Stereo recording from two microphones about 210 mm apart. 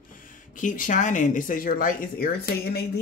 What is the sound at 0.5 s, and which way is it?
Speech, 40° left (ahead or behind).